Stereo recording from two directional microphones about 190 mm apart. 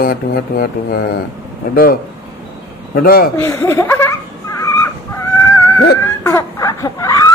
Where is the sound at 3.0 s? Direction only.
50° left (ahead or behind).